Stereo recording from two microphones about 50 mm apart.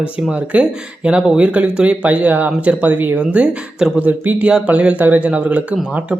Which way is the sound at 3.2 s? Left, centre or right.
Right.